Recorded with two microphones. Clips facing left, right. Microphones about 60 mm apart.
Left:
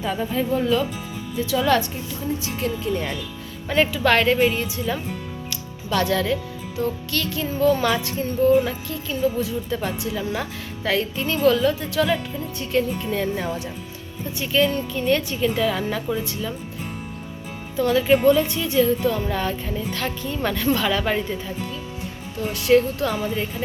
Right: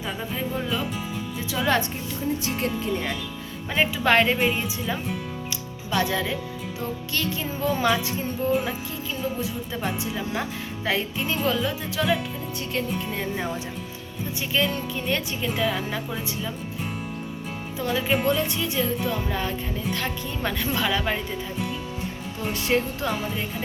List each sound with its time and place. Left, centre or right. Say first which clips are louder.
0.0 s speech: left 6 dB; centre
1.4 s speech: left 4 dB; right
2.4 s speech: left 1 dB; right
3.7 s speech: left 3 dB; centre
5.5 s music: left 6 dB; centre
6.7 s speech: left 5 dB; right
14.5 s speech: left 5 dB; centre
17.7 s speech: left 7 dB; centre
22.4 s speech: left 7 dB; right